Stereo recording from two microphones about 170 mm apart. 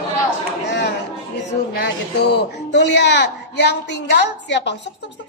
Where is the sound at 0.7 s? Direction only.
90° left.